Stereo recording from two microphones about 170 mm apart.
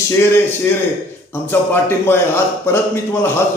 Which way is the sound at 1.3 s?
15° left (ahead or behind).